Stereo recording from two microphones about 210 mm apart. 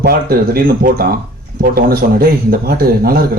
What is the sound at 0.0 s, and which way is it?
A man's voice, 45° right (ahead or behind).